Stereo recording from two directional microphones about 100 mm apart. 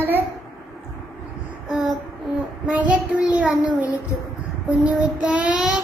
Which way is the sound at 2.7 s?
10° right (ahead or behind).